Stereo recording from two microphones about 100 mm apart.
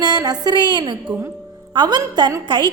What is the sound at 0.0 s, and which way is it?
A woman's voice, 45° right (ahead or behind).